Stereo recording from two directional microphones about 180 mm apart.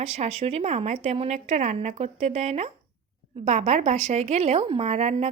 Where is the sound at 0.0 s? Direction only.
35° right (ahead or behind).